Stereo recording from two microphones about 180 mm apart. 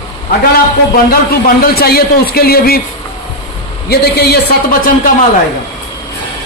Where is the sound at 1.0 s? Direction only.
55° left (ahead or behind).